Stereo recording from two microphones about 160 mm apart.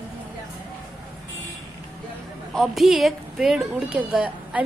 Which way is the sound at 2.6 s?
Centre (ahead or behind).